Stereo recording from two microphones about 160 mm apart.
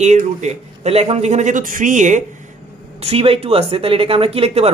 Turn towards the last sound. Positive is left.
turn(degrees=-40)  # may be behind; listen again after turning